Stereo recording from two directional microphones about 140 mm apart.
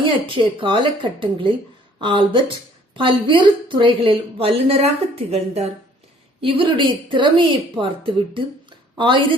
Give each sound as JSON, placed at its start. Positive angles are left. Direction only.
{"t": 0.6, "sound": "a woman's voice", "side_deg": -35}
{"t": 6.4, "sound": "a woman's voice", "side_deg": -35}